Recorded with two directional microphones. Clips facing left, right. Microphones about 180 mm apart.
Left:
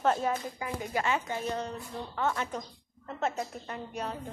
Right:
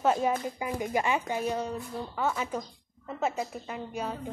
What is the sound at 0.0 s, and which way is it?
A woman's voice, 10° right (ahead or behind).